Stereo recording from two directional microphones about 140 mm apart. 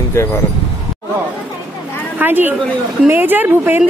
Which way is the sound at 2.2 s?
15° right (ahead or behind).